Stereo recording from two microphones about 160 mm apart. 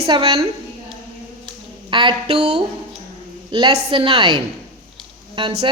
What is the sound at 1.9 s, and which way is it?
Speech, 30° right (ahead or behind).